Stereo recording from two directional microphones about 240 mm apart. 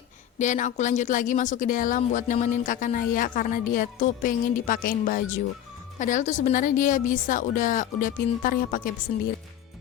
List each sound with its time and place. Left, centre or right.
0.3 s speech: left